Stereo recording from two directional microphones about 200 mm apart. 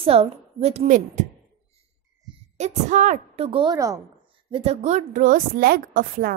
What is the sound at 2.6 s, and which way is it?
A woman's voice, 35° right (ahead or behind).